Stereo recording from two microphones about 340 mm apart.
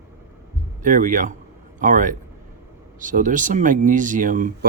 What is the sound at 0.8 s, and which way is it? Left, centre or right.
Speech, right.